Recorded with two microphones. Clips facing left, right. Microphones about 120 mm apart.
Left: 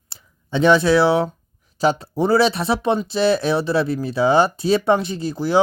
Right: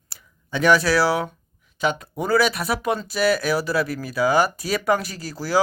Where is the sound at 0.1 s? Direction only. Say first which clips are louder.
Left 5 dB; 25° left (ahead or behind).